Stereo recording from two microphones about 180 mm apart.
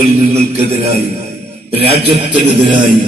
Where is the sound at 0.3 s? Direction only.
35° right (ahead or behind).